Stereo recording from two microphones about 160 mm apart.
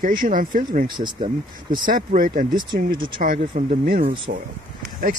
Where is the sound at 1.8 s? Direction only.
60° right (ahead or behind).